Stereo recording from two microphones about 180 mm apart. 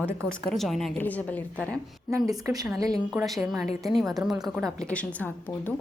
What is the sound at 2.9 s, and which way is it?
A woman's voice, centre (ahead or behind).